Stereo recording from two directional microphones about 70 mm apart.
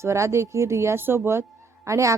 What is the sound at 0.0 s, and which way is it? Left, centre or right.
A woman's voice, right.